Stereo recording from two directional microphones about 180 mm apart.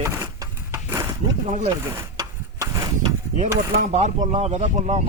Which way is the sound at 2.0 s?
20° right (ahead or behind).